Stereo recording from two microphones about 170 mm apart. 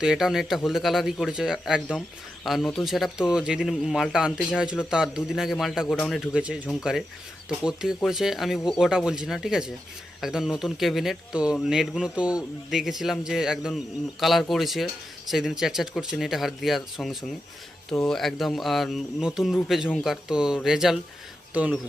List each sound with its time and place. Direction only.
0.0 s a man's voice: 5° right (ahead or behind)